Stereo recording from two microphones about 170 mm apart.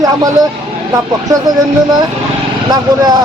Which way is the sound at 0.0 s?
20° right (ahead or behind).